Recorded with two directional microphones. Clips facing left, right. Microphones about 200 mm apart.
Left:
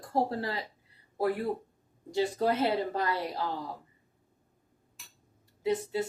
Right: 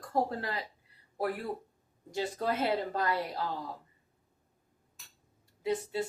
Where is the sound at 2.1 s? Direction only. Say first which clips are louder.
Left 5 dB; 20° left (ahead or behind).